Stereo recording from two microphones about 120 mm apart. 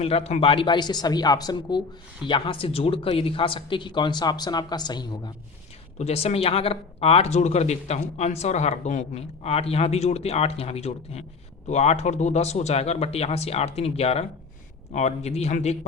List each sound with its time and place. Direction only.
0.0 s speech: 60° left (ahead or behind); by 5.3 s 35° left (ahead or behind)
6.0 s a man's voice: 60° left (ahead or behind)